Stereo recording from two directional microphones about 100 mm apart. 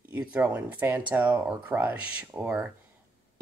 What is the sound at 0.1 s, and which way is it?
Speech, 15° right (ahead or behind).